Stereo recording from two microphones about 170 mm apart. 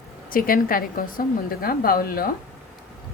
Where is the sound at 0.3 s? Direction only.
55° left (ahead or behind).